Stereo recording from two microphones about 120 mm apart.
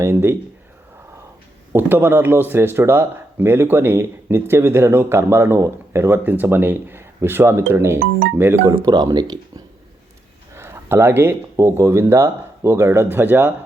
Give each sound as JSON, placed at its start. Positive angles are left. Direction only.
{"t": 0.0, "sound": "speech", "side_deg": -20}
{"t": 1.7, "sound": "speech", "side_deg": -15}
{"t": 8.7, "sound": "speech", "side_deg": -30}
{"t": 10.5, "sound": "speech", "side_deg": -20}